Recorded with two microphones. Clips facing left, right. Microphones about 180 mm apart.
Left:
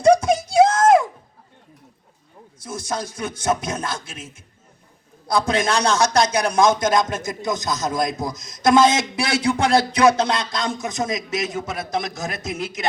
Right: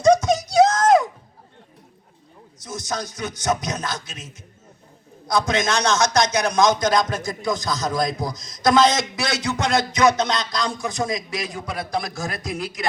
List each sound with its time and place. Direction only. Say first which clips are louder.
0.0 s a sound: left 1 dB; 30° left (ahead or behind)
2.6 s speech: left 1 dB; 30° left (ahead or behind)
5.3 s speech: left 1 dB; 30° left (ahead or behind)